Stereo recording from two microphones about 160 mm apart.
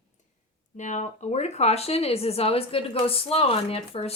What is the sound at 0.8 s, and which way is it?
Speech, 50° left (ahead or behind).